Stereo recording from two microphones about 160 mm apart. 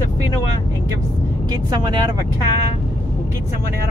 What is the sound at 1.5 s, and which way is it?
Speech, 25° right (ahead or behind).